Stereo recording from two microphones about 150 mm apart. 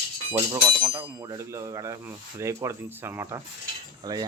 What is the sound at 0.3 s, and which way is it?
Speech, 25° right (ahead or behind).